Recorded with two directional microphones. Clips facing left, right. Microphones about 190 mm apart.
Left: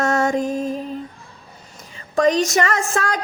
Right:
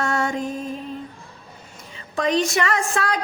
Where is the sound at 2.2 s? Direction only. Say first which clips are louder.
Left 4 dB; 45° left (ahead or behind).